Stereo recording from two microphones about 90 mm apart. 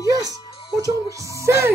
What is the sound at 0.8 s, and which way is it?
Music, 40° right (ahead or behind).